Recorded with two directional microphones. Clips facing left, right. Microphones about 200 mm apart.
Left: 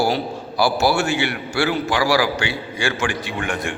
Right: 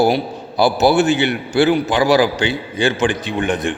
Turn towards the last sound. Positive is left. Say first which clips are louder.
# right 6 dB
turn(degrees=-20)  # may be behind; listen again after turning